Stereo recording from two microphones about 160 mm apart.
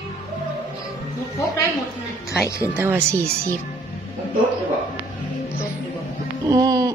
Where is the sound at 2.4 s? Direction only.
20° left (ahead or behind).